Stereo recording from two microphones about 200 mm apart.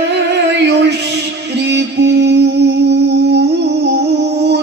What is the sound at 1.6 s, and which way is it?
Music, 55° right (ahead or behind).